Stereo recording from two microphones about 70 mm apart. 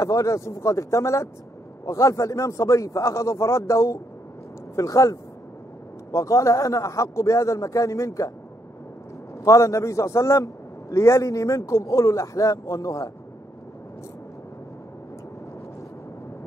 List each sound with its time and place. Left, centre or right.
0.0 s a man's voice: left
9.4 s a man's voice: left